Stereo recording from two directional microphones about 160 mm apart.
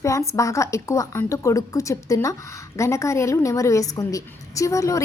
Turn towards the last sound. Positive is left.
turn(degrees=20)  # may be behind; listen again after turning